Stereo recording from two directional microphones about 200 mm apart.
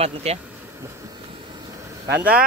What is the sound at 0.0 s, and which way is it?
Speech, 30° right (ahead or behind).